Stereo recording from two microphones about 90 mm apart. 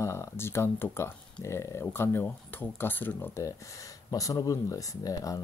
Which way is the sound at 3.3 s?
40° left (ahead or behind).